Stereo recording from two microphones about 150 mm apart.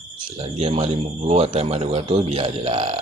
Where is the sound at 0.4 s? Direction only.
45° right (ahead or behind).